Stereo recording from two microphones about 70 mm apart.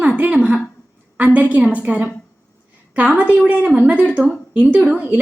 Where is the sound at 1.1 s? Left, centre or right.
Right.